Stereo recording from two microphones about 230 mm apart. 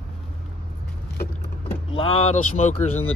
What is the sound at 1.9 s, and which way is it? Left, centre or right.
Speech, left.